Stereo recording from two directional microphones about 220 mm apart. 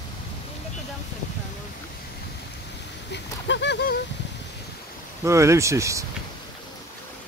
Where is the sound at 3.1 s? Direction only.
55° left (ahead or behind).